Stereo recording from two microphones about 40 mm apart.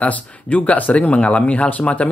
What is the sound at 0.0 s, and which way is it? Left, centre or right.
Speech, left.